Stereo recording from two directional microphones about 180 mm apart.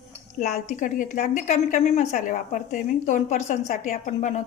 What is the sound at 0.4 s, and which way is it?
A woman's voice, 40° left (ahead or behind).